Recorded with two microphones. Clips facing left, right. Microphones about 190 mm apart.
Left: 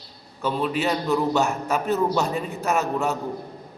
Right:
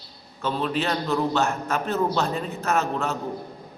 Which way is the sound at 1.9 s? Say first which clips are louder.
Left 2 dB; 15° left (ahead or behind).